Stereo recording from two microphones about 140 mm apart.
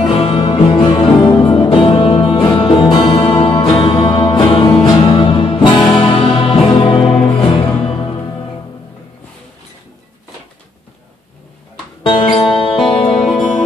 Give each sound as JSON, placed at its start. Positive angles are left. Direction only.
{"t": 0.0, "sound": "music", "side_deg": 45}
{"t": 12.0, "sound": "music", "side_deg": 35}